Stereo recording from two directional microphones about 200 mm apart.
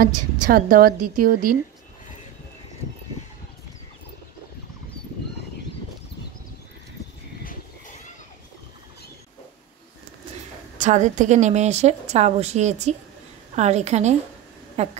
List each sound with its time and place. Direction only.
0.0 s a woman's voice: 45° right (ahead or behind)
10.8 s a woman's voice: 35° right (ahead or behind)